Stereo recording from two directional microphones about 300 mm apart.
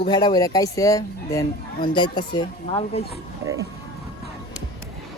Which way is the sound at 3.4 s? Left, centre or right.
Centre.